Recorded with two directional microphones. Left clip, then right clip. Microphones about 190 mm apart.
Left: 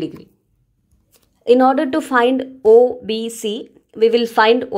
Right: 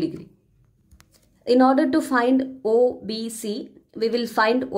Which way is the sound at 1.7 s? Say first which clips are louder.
Left 3 dB; 20° left (ahead or behind).